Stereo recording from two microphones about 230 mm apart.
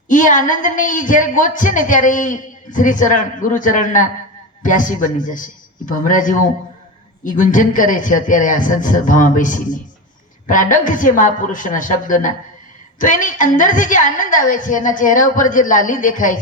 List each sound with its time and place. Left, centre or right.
0.1 s a woman's voice: left